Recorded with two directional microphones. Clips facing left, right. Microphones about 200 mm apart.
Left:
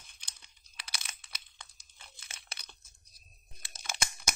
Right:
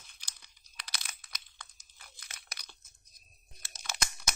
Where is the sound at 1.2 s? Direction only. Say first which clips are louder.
Right 1 dB; 25° left (ahead or behind).